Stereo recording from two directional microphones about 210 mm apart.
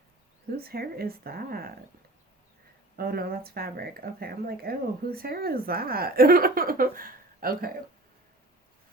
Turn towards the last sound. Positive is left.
turn(degrees=-45)  # may be behind; listen again after turning